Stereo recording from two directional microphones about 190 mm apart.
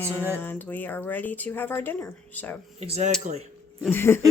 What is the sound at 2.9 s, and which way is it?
Speech, 35° right (ahead or behind).